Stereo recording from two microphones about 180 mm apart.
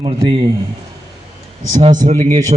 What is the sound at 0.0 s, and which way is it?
Speech, 30° right (ahead or behind).